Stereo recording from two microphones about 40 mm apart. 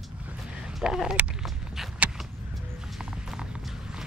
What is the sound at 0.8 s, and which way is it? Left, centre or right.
Speech, centre.